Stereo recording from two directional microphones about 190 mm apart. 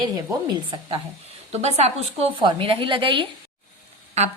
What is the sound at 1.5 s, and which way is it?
A woman's voice, 35° right (ahead or behind).